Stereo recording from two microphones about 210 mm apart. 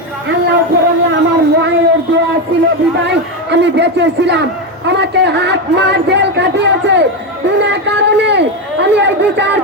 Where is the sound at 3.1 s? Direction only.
55° right (ahead or behind).